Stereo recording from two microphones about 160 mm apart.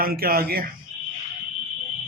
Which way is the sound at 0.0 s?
65° right (ahead or behind).